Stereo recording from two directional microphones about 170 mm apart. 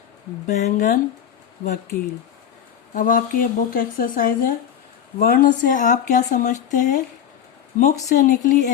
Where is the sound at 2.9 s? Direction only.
50° left (ahead or behind).